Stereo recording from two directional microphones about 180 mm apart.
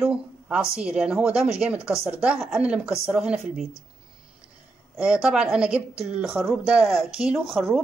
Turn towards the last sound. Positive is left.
turn(degrees=0)  # may be behind; listen again after turning